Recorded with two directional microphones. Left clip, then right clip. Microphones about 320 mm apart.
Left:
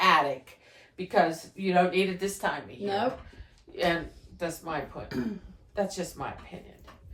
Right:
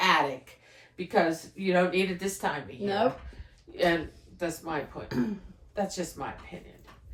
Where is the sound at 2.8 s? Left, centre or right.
Right.